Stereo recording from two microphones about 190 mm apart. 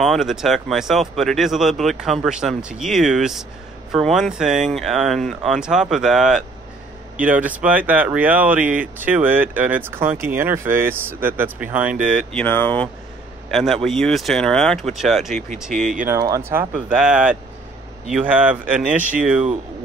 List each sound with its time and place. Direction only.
0.0 s a man's voice: centre (ahead or behind)
15.7 s speech: 40° right (ahead or behind)
16.1 s speech: 15° right (ahead or behind)